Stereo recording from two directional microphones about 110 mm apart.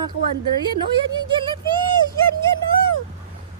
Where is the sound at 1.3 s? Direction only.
45° right (ahead or behind).